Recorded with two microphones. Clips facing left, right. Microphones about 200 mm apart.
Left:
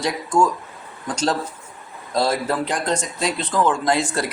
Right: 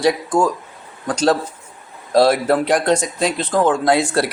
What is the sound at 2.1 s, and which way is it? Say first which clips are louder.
Speech: right 7 dB; 70° right (ahead or behind).